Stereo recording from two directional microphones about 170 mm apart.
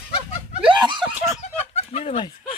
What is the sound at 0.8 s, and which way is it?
Speech, 25° right (ahead or behind).